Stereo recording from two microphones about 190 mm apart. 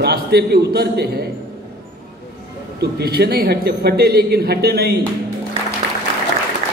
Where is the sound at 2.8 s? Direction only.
55° right (ahead or behind).